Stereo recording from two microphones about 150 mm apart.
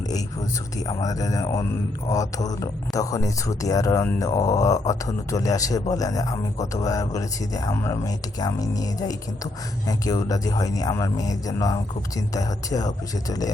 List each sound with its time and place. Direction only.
0.9 s speech: 25° left (ahead or behind)